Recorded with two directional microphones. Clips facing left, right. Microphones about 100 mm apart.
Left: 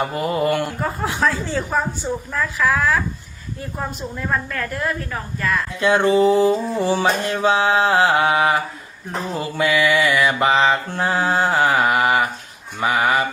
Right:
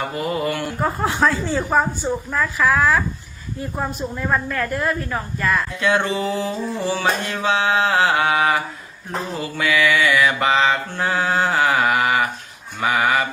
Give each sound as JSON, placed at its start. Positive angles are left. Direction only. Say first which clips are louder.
{"t": 0.2, "sound": "speech", "louder": "left 3 dB", "side_deg": 35}
{"t": 0.8, "sound": "a woman's voice", "louder": "right 2 dB", "side_deg": 0}
{"t": 4.3, "sound": "a woman's voice", "louder": "right 2 dB", "side_deg": -5}
{"t": 5.8, "sound": "speech", "louder": "left 3 dB", "side_deg": 15}
{"t": 6.1, "sound": "a sound", "louder": "left 8 dB", "side_deg": 40}
{"t": 6.9, "sound": "mantra", "louder": "left 2 dB", "side_deg": 20}
{"t": 7.4, "sound": "mantra", "louder": "left 2 dB", "side_deg": 35}